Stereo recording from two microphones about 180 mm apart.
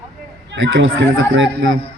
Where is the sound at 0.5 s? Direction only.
90° right.